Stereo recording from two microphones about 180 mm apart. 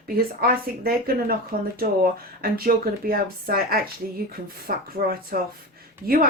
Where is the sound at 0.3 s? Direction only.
55° right (ahead or behind).